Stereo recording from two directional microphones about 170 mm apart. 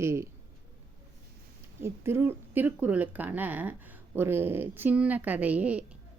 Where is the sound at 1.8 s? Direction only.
15° right (ahead or behind).